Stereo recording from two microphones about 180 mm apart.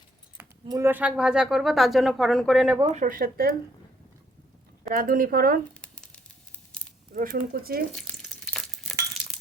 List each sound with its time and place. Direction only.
0.3 s speech: 15° right (ahead or behind)
2.9 s speech: 45° right (ahead or behind)
4.9 s speech: 50° right (ahead or behind)
5.8 s a sound: 5° left (ahead or behind)
7.1 s speech: 50° right (ahead or behind)
7.9 s frying: 5° left (ahead or behind)